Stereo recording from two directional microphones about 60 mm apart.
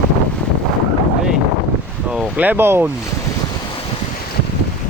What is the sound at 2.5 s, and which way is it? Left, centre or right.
Speech, right.